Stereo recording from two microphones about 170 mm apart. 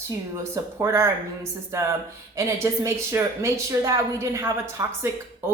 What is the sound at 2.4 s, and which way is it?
A woman's voice, 15° right (ahead or behind).